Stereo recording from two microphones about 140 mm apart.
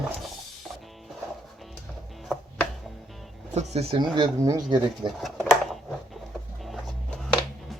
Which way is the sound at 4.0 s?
30° right (ahead or behind).